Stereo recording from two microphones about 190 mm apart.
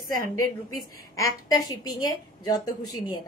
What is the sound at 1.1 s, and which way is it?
A woman's voice, 20° left (ahead or behind).